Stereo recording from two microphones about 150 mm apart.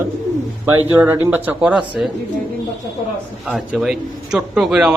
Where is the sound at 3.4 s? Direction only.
5° right (ahead or behind).